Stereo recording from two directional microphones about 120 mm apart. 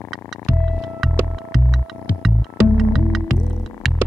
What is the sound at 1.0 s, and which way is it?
Music, centre (ahead or behind).